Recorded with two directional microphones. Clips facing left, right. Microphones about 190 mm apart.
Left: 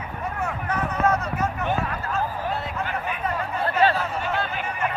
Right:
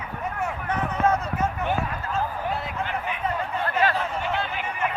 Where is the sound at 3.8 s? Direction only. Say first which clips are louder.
Left 4 dB; 30° left (ahead or behind).